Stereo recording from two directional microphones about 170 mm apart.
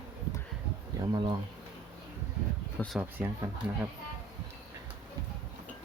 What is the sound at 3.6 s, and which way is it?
Speech, 10° right (ahead or behind).